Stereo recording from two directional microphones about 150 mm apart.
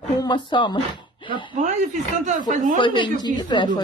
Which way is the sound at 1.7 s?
50° right (ahead or behind).